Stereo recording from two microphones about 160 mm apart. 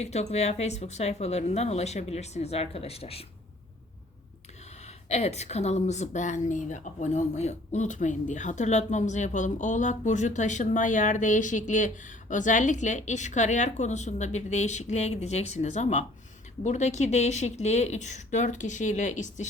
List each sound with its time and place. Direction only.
0.0 s a woman's voice: 45° left (ahead or behind)
5.0 s a woman's voice: 45° left (ahead or behind)